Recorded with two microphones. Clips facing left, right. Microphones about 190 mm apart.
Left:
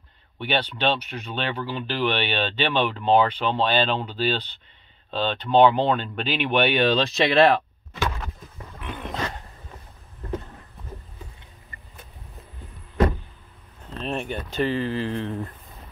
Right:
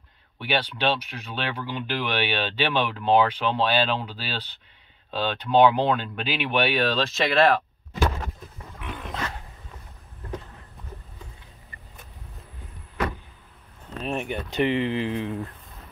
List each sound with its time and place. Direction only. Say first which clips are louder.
0.4 s speech: left 1 dB; 5° right (ahead or behind)
7.9 s a sound: right 3 dB; 40° right (ahead or behind)
8.8 s dog: left 2 dB; centre (ahead or behind)
14.0 s speech: even; 15° right (ahead or behind)
15.2 s speech: even; centre (ahead or behind)